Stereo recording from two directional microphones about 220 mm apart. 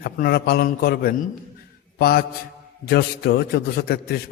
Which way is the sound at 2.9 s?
45° left (ahead or behind).